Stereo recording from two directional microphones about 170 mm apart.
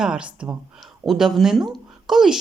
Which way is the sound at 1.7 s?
Centre (ahead or behind).